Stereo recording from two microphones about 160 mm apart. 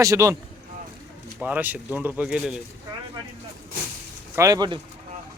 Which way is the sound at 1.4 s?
10° right (ahead or behind).